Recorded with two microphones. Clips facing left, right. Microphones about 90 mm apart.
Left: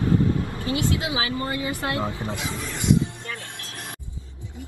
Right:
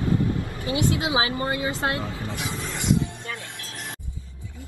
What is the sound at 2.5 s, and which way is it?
Speech, 25° right (ahead or behind).